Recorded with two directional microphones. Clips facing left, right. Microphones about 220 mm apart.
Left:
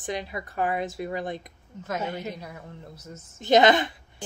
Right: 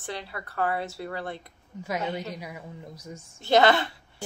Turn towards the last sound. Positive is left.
turn(degrees=15)  # may be behind; listen again after turning